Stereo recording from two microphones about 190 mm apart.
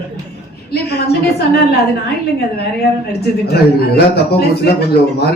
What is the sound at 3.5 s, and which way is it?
A man's voice, 55° left (ahead or behind).